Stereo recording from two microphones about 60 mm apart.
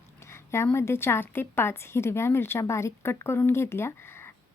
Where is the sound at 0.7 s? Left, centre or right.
Left.